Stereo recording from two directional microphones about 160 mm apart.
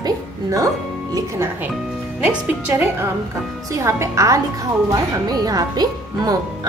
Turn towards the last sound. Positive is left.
turn(degrees=-25)  # may be behind; listen again after turning